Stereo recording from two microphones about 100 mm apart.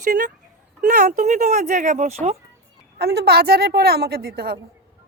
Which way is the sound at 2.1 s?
90° right.